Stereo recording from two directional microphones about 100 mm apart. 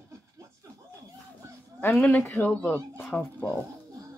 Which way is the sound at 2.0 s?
5° left (ahead or behind).